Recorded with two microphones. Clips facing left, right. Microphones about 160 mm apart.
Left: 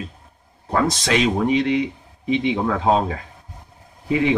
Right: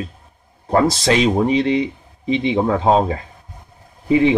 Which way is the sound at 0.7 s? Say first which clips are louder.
Right 4 dB; 35° right (ahead or behind).